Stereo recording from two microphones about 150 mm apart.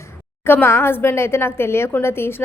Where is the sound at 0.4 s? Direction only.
15° left (ahead or behind).